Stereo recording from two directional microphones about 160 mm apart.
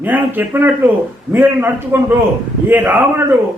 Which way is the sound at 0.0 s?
10° right (ahead or behind).